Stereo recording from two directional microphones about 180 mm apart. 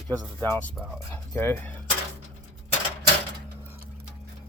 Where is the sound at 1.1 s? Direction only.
10° left (ahead or behind).